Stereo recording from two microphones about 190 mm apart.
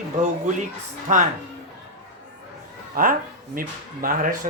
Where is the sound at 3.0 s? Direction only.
50° right (ahead or behind).